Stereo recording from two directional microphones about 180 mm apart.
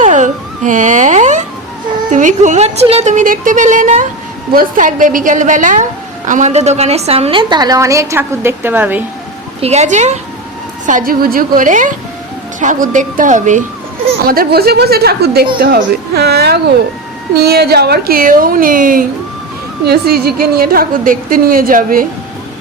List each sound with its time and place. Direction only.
0.0 s a sound: 45° right (ahead or behind)
2.0 s a woman's voice: 45° right (ahead or behind); by 9.0 s 10° right (ahead or behind)
9.6 s a woman's voice: 35° right (ahead or behind)
14.3 s a woman's voice: 55° right (ahead or behind)
19.8 s a woman's voice: 60° right (ahead or behind)